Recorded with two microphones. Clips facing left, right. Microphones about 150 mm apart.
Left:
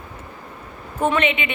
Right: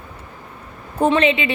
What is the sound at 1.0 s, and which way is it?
Speech, 35° right (ahead or behind).